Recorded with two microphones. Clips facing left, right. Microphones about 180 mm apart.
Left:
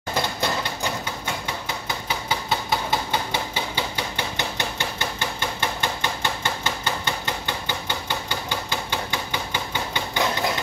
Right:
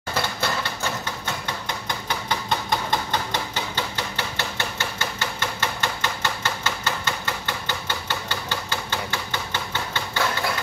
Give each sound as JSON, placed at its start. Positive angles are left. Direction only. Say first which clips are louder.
{"t": 0.1, "sound": "typewriter", "louder": "left 1 dB", "side_deg": 15}
{"t": 1.9, "sound": "hammer", "louder": "even", "side_deg": 5}